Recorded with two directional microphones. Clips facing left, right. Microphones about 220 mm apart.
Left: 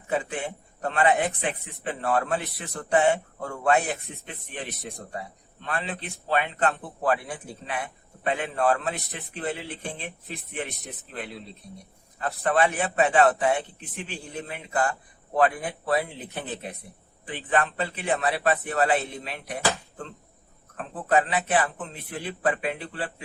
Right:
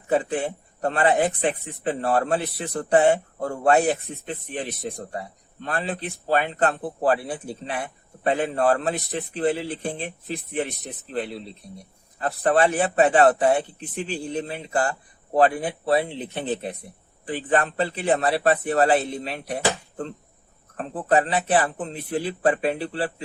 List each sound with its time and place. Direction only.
0.1 s a man's voice: 35° right (ahead or behind)
17.2 s a man's voice: 35° right (ahead or behind)